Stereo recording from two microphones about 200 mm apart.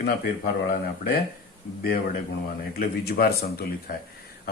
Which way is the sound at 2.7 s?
50° left (ahead or behind).